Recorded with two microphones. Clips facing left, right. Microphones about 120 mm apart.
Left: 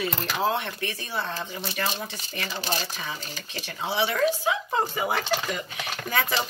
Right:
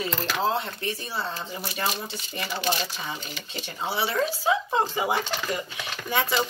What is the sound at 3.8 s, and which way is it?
Speech, 30° right (ahead or behind).